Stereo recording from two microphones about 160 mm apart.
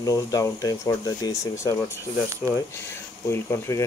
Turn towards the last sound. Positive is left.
turn(degrees=15)  # may be behind; listen again after turning